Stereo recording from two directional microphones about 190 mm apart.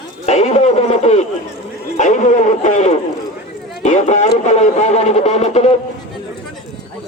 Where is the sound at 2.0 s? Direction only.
40° left (ahead or behind).